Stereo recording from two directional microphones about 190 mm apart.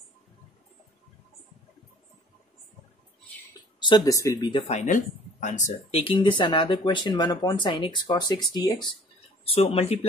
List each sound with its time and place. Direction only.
3.8 s speech: 20° left (ahead or behind); by 5.9 s 40° left (ahead or behind)
6.0 s speech: 25° left (ahead or behind)